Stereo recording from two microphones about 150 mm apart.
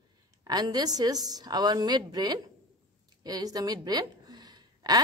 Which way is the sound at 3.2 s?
25° right (ahead or behind).